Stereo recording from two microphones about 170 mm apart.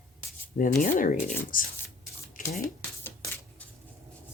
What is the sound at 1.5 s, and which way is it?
Speech, 55° left (ahead or behind).